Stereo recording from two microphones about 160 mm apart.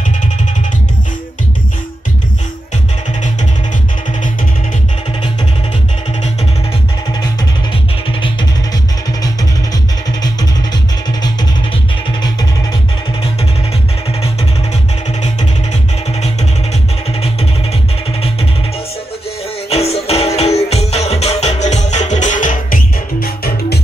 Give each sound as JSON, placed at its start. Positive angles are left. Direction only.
{"t": 19.7, "sound": "music", "side_deg": 40}
{"t": 23.2, "sound": "music", "side_deg": 70}